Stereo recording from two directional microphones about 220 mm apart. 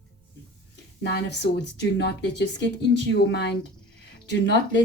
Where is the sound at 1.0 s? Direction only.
50° left (ahead or behind).